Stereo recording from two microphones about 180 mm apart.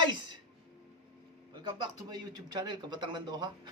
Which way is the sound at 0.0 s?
25° right (ahead or behind).